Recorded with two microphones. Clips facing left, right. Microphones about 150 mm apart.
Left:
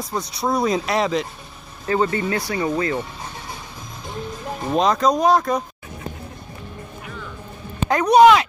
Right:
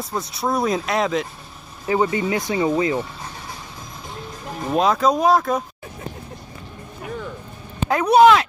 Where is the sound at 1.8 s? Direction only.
15° right (ahead or behind).